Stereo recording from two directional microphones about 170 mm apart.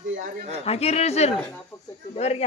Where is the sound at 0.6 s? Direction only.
35° left (ahead or behind).